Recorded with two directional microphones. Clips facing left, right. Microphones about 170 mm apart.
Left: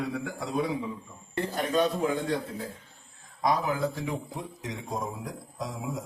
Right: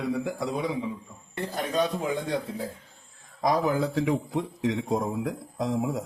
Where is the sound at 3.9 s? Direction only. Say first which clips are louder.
Right 8 dB; 80° right; by 6.0 s 50° right (ahead or behind).